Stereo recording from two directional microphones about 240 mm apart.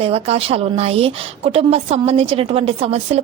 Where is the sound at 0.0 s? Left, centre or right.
Right.